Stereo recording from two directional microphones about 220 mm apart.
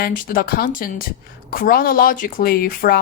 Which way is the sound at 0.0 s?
40° left (ahead or behind).